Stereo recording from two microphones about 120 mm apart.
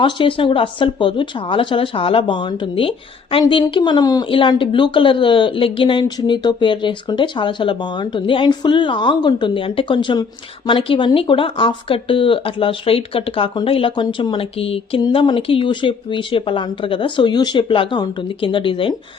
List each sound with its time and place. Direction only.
0.0 s speech: 45° left (ahead or behind)
4.3 s speech: 45° left (ahead or behind)